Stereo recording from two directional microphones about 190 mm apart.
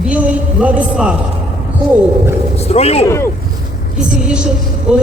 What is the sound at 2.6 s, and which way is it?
Speech, 35° left (ahead or behind).